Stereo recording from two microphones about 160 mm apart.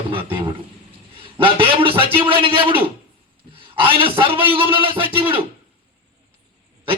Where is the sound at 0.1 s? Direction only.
30° right (ahead or behind).